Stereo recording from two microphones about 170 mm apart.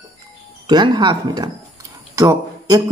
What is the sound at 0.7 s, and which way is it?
A woman's voice, 25° right (ahead or behind).